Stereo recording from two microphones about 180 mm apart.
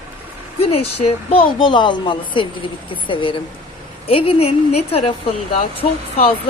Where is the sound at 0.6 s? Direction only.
35° left (ahead or behind).